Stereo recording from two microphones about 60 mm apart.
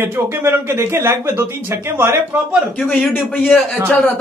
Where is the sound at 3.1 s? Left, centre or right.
Left.